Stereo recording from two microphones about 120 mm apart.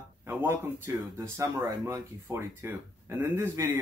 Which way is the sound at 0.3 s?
20° right (ahead or behind).